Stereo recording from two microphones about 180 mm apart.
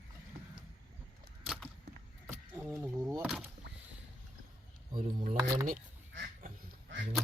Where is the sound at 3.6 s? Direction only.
75° right (ahead or behind).